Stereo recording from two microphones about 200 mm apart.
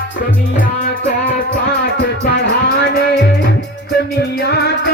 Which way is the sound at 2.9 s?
55° left (ahead or behind).